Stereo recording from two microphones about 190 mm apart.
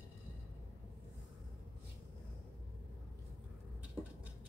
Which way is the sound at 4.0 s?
20° left (ahead or behind).